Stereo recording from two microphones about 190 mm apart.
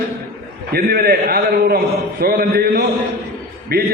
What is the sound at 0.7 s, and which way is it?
A man's voice, 55° right (ahead or behind).